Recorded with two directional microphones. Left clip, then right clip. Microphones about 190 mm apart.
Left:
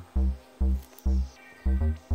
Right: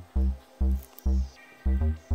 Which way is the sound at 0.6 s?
40° right (ahead or behind).